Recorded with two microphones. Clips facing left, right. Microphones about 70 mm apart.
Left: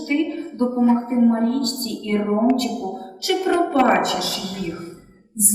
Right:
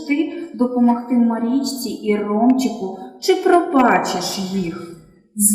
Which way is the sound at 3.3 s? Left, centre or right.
Centre.